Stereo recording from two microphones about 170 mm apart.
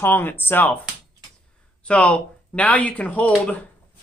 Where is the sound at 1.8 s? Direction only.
5° left (ahead or behind).